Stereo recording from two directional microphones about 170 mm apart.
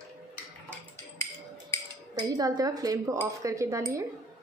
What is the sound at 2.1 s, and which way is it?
Speech, 20° right (ahead or behind).